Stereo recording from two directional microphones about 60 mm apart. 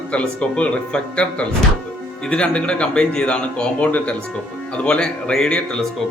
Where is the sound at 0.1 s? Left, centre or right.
Centre.